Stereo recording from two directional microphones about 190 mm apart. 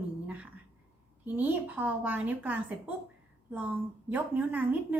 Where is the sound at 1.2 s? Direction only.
10° right (ahead or behind).